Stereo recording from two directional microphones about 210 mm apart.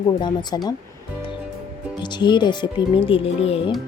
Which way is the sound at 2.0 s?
20° left (ahead or behind).